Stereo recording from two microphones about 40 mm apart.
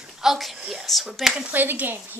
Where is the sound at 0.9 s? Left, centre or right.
Centre.